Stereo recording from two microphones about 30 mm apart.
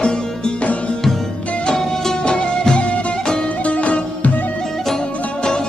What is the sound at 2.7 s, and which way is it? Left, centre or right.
Music, left.